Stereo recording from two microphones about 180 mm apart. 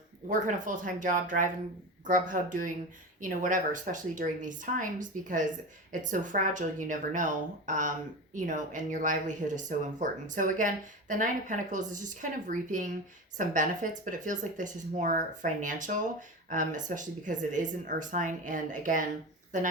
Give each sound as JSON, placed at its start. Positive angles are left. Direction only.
{"t": 0.3, "sound": "speech", "side_deg": -45}